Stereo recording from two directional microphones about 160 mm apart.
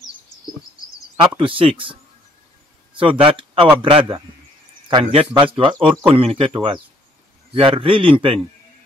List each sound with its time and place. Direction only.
1.3 s speech: 35° right (ahead or behind)
3.0 s speech: 35° right (ahead or behind)